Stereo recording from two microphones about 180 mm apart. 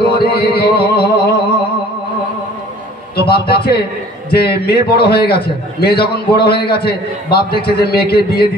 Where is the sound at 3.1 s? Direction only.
60° left (ahead or behind).